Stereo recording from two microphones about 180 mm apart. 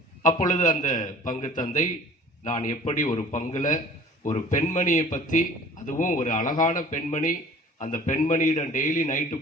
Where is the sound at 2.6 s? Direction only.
45° left (ahead or behind).